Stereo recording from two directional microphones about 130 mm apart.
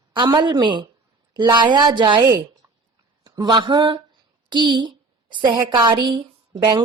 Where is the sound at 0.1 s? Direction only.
35° right (ahead or behind).